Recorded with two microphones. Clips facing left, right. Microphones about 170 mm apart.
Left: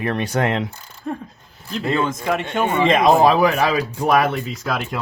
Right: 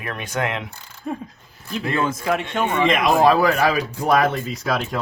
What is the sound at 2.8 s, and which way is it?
Speech, 30° left (ahead or behind).